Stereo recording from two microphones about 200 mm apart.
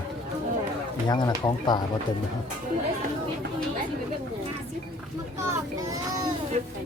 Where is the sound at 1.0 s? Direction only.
20° left (ahead or behind).